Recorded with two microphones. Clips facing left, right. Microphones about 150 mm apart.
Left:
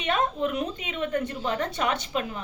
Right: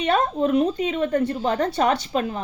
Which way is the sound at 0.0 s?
35° right (ahead or behind).